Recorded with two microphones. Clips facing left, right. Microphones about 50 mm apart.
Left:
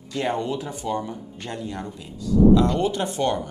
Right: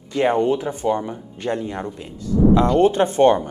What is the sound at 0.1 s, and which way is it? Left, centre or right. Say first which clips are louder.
Speech: right 7 dB; right.